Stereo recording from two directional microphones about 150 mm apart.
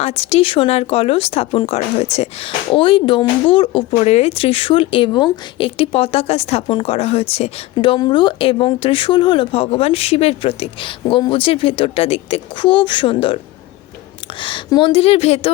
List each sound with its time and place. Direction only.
0.0 s speech: 45° left (ahead or behind)
14.4 s speech: 35° left (ahead or behind)